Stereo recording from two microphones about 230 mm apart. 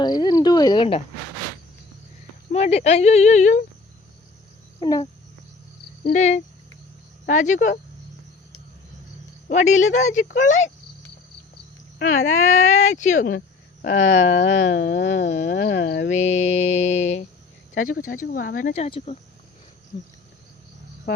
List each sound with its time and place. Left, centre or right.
0.0 s speech: centre
2.5 s mantra: left
4.8 s speech: centre
6.1 s mantra: left
7.3 s speech: left
9.5 s speech: left
11.9 s speech: left
14.0 s a sound: left
16.0 s mantra: left
17.7 s speech: left